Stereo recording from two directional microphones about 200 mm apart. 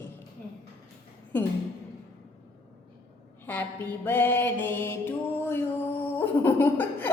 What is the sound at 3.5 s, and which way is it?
Music, 10° left (ahead or behind).